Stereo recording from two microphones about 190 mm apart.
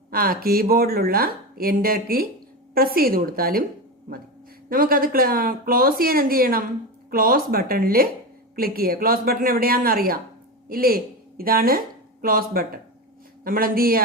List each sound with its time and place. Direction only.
0.1 s a woman's voice: 50° right (ahead or behind)